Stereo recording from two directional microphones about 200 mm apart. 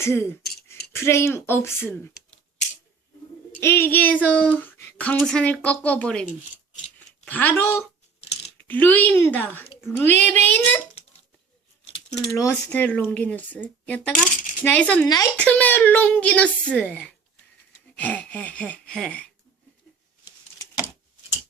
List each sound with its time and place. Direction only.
0.0 s speech: 10° left (ahead or behind)
3.6 s speech: 10° left (ahead or behind)
7.3 s speech: 10° left (ahead or behind)
12.4 s speech: 10° left (ahead or behind)
15.0 s speech: 20° left (ahead or behind)
15.4 s speech: 5° left (ahead or behind)